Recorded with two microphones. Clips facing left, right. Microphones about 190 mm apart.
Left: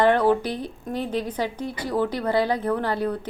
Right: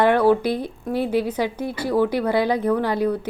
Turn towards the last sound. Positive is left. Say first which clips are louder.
# right 4 dB
turn(degrees=-10)  # may be behind; listen again after turning